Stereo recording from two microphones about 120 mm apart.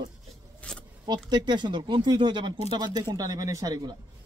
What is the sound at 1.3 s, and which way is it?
A man's voice, 40° right (ahead or behind).